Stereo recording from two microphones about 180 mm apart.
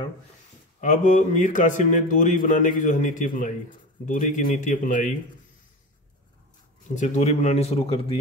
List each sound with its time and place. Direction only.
0.7 s a man's voice: 45° left (ahead or behind)
7.0 s speech: 40° left (ahead or behind)